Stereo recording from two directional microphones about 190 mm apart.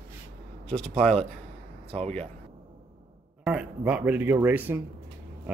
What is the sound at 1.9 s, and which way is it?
Speech, 35° right (ahead or behind).